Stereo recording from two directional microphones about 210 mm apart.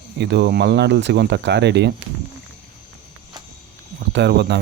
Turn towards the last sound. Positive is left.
turn(degrees=-55)  # may be behind; listen again after turning